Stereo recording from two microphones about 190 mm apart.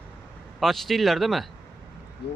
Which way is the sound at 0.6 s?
Centre (ahead or behind).